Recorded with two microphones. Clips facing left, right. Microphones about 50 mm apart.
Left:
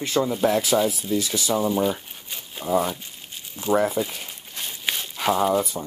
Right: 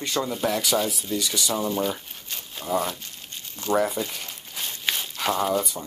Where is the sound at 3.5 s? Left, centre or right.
Centre.